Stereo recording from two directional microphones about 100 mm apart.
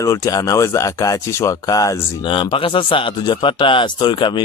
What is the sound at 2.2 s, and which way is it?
Speech, 55° left (ahead or behind).